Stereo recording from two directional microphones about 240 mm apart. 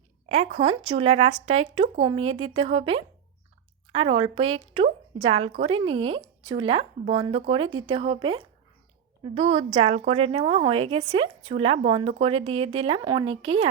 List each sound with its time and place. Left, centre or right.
0.3 s speech: right